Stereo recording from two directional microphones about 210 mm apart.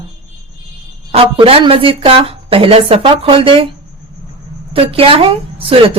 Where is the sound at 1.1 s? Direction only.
25° right (ahead or behind).